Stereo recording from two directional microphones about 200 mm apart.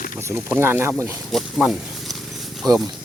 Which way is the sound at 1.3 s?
Centre (ahead or behind).